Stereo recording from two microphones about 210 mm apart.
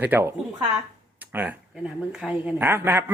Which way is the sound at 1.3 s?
10° right (ahead or behind).